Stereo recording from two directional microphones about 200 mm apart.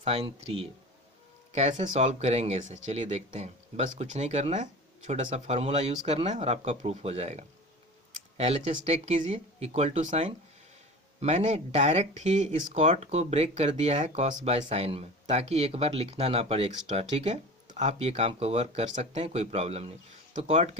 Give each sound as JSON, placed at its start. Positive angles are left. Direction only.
{"t": 0.0, "sound": "speech", "side_deg": -30}